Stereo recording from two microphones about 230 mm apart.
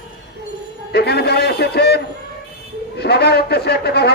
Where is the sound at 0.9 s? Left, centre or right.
Left.